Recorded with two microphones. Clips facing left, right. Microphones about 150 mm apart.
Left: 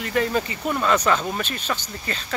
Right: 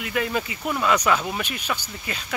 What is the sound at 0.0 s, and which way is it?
Speech, 5° right (ahead or behind).